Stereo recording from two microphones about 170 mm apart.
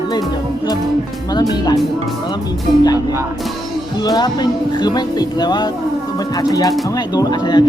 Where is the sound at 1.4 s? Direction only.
25° left (ahead or behind).